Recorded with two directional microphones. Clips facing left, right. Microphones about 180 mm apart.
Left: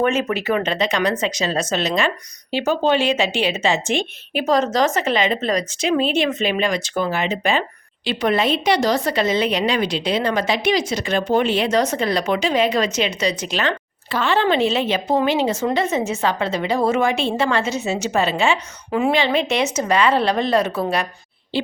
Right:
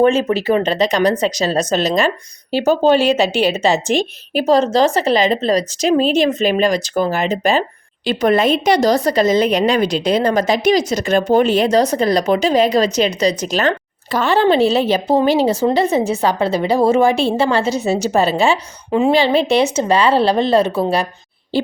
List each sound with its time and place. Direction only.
0.0 s a woman's voice: 30° right (ahead or behind)
18.9 s a woman's voice: 25° right (ahead or behind)
21.5 s a sound: 40° right (ahead or behind)